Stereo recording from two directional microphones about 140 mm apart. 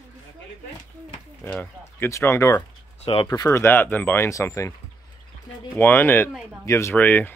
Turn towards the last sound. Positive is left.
turn(degrees=15)  # may be behind; listen again after turning